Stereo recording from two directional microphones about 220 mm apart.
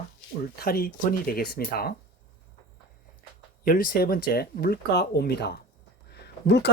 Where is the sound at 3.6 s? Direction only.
40° left (ahead or behind).